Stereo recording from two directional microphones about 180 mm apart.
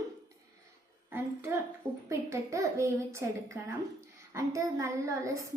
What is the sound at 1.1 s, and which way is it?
A woman's voice, 10° right (ahead or behind).